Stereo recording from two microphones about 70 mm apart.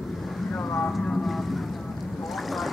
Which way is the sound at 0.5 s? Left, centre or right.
Centre.